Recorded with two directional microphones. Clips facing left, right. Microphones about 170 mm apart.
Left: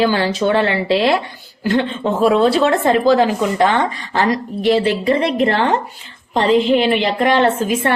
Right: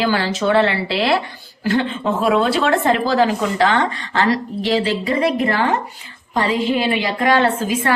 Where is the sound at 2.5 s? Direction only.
20° left (ahead or behind).